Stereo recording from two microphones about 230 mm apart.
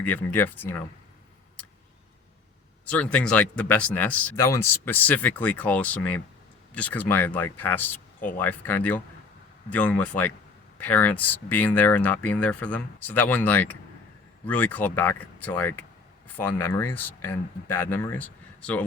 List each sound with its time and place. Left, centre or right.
0.0 s speech: centre
2.8 s speech: centre